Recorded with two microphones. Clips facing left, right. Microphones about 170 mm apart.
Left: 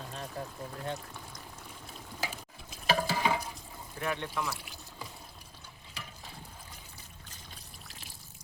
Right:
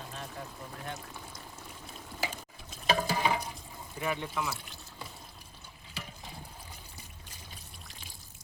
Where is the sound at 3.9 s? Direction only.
5° right (ahead or behind).